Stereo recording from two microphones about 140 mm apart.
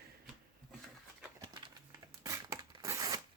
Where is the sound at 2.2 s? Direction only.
20° right (ahead or behind).